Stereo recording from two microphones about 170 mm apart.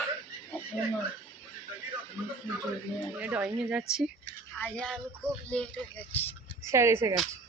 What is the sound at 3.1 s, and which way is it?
Speech, 10° right (ahead or behind).